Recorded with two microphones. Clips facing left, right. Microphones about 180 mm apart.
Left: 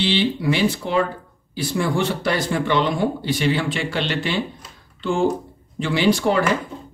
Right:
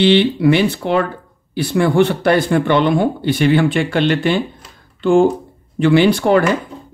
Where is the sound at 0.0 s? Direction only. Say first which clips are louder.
Right 8 dB; 60° right (ahead or behind).